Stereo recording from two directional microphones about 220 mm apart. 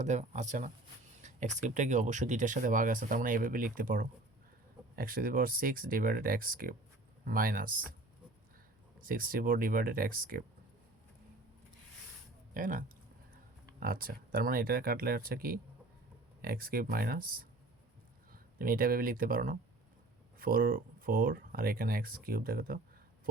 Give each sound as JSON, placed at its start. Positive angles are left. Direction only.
{"t": 0.0, "sound": "speech", "side_deg": -30}
{"t": 9.0, "sound": "speech", "side_deg": -40}
{"t": 12.5, "sound": "speech", "side_deg": -35}